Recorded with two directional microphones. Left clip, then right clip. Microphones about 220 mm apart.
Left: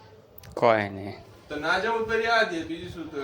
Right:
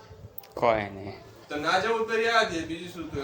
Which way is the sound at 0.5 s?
15° left (ahead or behind).